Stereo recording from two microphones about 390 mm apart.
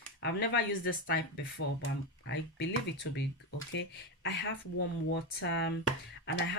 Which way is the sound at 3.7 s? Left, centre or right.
Left.